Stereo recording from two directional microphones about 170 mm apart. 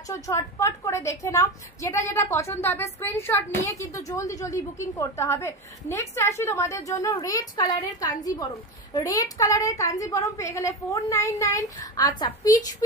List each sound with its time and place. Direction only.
0.1 s a woman's voice: 15° left (ahead or behind)